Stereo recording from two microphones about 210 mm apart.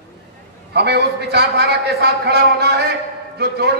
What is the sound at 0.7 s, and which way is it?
A man's voice, 50° right (ahead or behind).